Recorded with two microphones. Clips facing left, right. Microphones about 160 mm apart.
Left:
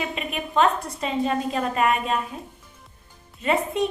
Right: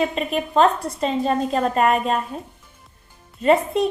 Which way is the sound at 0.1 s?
35° right (ahead or behind).